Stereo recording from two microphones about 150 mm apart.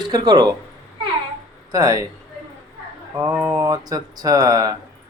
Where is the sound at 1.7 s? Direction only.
20° right (ahead or behind).